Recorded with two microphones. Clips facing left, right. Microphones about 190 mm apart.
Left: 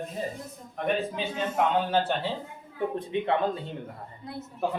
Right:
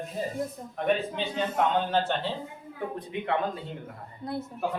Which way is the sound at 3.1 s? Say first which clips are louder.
Left 6 dB; 25° left (ahead or behind).